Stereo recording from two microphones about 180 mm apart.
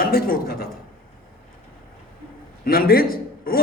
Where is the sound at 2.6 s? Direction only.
55° left (ahead or behind).